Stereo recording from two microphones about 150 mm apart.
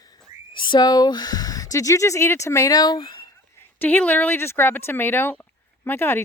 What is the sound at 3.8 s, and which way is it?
Speech, 10° left (ahead or behind).